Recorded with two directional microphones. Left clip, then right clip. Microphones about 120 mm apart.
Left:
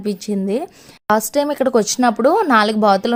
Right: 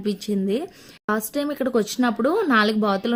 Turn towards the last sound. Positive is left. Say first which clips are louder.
# left 7 dB
turn(degrees=35)  # may be behind; listen again after turning